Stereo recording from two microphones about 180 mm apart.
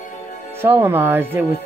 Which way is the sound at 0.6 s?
10° right (ahead or behind).